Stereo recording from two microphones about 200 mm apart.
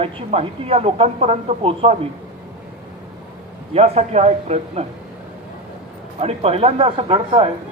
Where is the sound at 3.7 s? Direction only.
30° right (ahead or behind).